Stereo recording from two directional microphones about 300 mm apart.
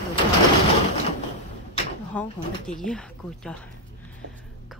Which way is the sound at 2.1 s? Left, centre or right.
Centre.